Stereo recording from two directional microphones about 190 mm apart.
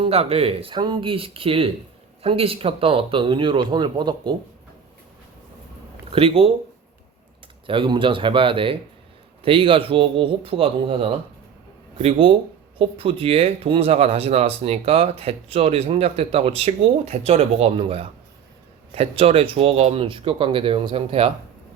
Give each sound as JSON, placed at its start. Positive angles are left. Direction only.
{"t": 0.0, "sound": "speech", "side_deg": -30}
{"t": 6.1, "sound": "speech", "side_deg": -30}
{"t": 7.7, "sound": "speech", "side_deg": -25}
{"t": 12.0, "sound": "speech", "side_deg": -30}